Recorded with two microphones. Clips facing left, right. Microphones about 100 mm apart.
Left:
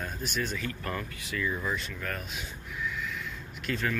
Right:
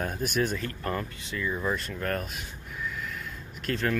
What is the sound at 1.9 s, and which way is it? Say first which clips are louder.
Speech: right 6 dB; 45° right (ahead or behind).